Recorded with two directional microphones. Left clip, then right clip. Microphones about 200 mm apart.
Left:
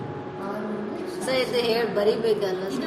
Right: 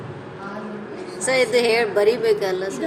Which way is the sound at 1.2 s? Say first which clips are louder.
Right 6 dB; 35° right (ahead or behind).